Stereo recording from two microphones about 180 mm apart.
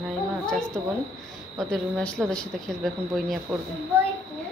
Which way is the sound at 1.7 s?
5° left (ahead or behind).